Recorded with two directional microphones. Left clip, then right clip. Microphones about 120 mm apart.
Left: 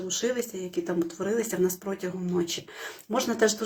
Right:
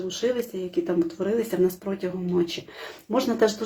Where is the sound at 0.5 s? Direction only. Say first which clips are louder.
Right 4 dB; 40° right (ahead or behind).